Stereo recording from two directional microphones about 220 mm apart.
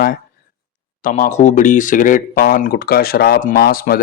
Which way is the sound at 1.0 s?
35° left (ahead or behind).